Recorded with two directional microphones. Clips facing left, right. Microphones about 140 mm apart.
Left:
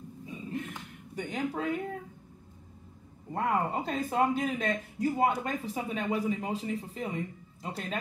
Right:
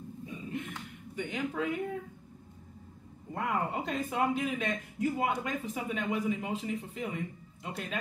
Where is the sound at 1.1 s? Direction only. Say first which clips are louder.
Left 1 dB; 40° left (ahead or behind).